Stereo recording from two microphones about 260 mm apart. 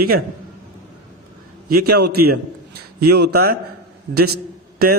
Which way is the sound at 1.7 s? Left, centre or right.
Right.